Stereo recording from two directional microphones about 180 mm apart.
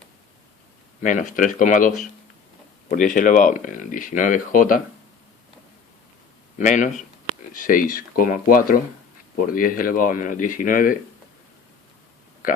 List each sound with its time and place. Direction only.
1.0 s speech: 45° left (ahead or behind)
6.6 s speech: 45° left (ahead or behind)